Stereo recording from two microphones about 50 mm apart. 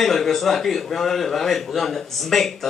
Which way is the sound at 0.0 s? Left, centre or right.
Centre.